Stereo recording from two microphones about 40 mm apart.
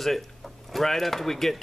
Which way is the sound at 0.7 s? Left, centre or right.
Centre.